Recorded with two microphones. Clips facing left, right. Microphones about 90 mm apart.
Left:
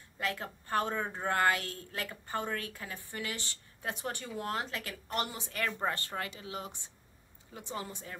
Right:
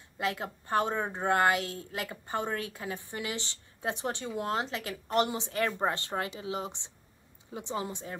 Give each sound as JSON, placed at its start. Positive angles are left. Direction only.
{"t": 0.2, "sound": "a woman's voice", "side_deg": -20}